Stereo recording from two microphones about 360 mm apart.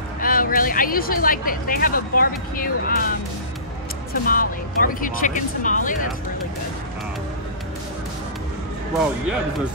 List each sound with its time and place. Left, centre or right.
0.2 s speech: left
4.1 s speech: left